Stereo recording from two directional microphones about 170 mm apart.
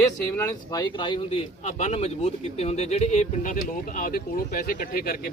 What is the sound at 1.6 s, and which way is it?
Speech, 40° left (ahead or behind).